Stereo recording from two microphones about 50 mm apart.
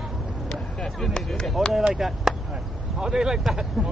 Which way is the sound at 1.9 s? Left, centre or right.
Centre.